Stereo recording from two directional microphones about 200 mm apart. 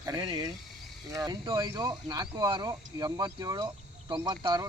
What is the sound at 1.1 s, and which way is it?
Speech, 20° right (ahead or behind).